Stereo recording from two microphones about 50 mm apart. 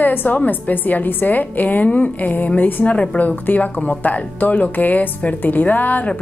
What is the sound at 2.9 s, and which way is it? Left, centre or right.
Speech, left.